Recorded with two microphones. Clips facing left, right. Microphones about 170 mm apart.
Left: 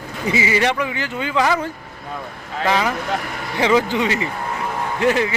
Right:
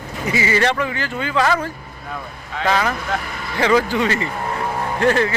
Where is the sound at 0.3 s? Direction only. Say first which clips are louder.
Even; 15° left (ahead or behind).